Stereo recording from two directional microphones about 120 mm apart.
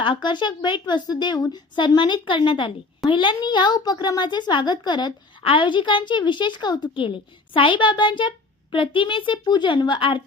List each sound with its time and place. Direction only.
0.0 s a child's voice: 40° left (ahead or behind)